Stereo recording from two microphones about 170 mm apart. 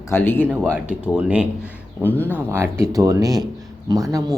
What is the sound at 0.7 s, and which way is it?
Speech, 10° right (ahead or behind).